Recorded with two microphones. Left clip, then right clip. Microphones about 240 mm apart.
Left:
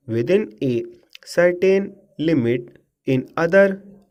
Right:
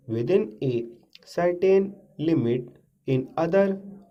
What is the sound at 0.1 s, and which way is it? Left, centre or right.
Speech, left.